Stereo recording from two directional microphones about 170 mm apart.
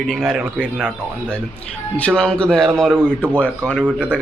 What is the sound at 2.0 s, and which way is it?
Speech, 5° left (ahead or behind).